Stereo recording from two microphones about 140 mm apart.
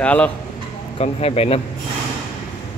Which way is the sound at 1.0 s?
45° left (ahead or behind).